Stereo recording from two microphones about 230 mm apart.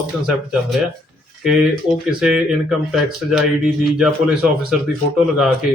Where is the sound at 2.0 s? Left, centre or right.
Centre.